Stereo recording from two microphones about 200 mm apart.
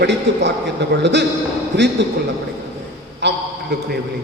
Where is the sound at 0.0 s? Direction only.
60° right (ahead or behind).